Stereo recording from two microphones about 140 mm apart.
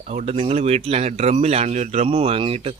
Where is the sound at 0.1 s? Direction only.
45° right (ahead or behind).